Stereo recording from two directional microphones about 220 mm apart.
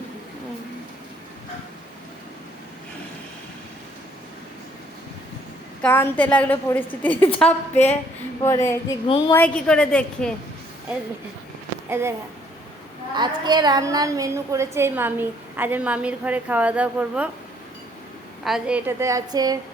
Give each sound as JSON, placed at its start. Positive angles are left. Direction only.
{"t": 5.8, "sound": "a woman's voice", "side_deg": 10}
{"t": 9.0, "sound": "a woman's voice", "side_deg": 25}
{"t": 9.3, "sound": "a woman's voice", "side_deg": 5}
{"t": 11.9, "sound": "speech", "side_deg": -10}
{"t": 13.1, "sound": "a woman's voice", "side_deg": -20}
{"t": 18.4, "sound": "a woman's voice", "side_deg": -5}